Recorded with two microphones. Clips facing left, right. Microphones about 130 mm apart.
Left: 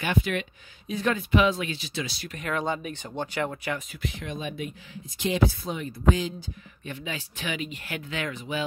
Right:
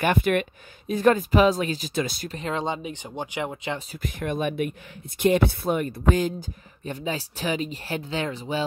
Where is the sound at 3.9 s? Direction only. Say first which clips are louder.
Right 5 dB; 45° right (ahead or behind).